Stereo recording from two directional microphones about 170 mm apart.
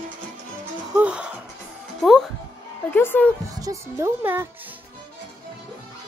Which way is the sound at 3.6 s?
20° right (ahead or behind).